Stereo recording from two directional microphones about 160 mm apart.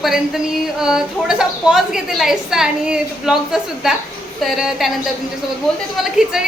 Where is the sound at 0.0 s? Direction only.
Centre (ahead or behind).